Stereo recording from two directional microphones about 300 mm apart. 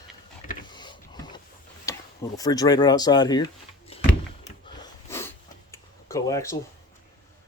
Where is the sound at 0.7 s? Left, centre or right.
Centre.